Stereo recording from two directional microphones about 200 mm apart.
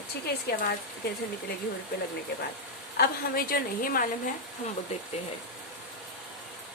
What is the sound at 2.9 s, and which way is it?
Speech, 50° left (ahead or behind).